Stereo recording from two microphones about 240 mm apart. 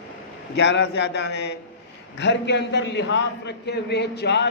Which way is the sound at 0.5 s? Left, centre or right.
Left.